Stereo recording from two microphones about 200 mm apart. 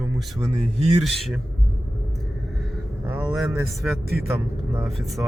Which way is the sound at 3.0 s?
10° right (ahead or behind).